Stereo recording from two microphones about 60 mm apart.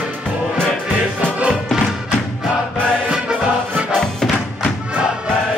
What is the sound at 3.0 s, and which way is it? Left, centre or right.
Music, centre.